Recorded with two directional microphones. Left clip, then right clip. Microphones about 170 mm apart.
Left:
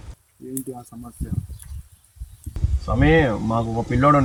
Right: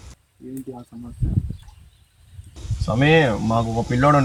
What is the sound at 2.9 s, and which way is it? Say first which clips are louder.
Speech: right 1 dB; 5° left (ahead or behind).